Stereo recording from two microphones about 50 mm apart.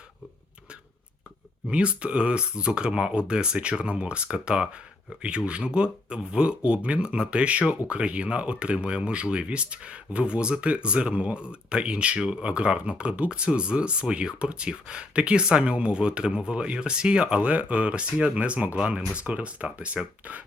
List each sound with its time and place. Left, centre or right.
1.7 s speech: right